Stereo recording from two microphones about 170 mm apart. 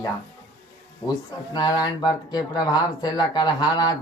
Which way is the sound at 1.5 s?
25° left (ahead or behind).